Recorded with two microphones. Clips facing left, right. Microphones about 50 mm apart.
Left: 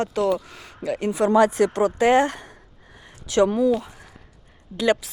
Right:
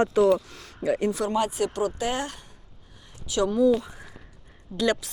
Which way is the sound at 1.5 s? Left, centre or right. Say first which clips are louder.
Left 6 dB; left.